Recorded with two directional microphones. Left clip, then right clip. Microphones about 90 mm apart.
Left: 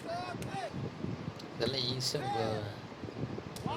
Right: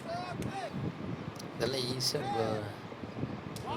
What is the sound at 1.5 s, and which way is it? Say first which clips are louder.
Speech: even; 30° right (ahead or behind).